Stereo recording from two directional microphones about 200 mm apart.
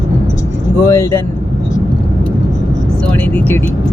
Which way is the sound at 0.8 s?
15° left (ahead or behind).